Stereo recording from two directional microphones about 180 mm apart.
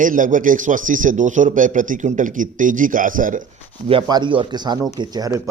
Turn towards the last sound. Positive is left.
turn(degrees=-20)  # may be behind; listen again after turning